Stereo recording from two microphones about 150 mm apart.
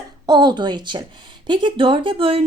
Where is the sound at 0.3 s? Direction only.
30° right (ahead or behind).